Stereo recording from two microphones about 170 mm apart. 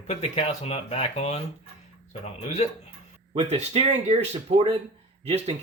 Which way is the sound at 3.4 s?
35° right (ahead or behind).